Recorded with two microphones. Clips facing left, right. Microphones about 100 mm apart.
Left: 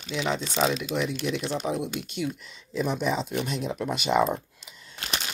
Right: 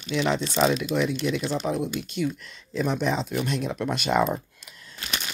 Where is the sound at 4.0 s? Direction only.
55° right (ahead or behind).